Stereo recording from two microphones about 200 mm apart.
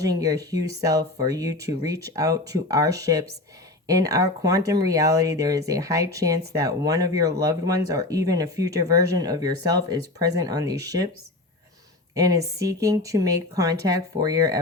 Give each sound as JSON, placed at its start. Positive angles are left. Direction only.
{"t": 0.0, "sound": "speech", "side_deg": -15}
{"t": 12.1, "sound": "speech", "side_deg": -15}